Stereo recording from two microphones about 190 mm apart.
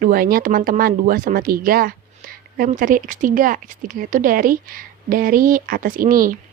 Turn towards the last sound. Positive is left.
turn(degrees=-50)  # may be behind; listen again after turning